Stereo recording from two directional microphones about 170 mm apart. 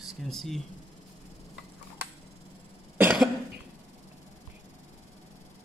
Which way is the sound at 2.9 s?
10° right (ahead or behind).